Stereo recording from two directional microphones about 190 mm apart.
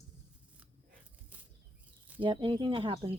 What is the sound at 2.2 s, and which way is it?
Speech, 25° right (ahead or behind).